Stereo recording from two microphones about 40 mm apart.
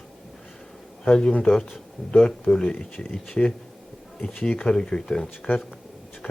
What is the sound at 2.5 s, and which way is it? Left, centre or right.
Speech, left.